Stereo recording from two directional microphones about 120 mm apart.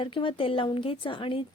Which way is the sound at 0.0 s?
45° left (ahead or behind).